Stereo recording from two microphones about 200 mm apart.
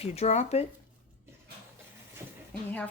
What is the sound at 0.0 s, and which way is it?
Speech, 30° left (ahead or behind).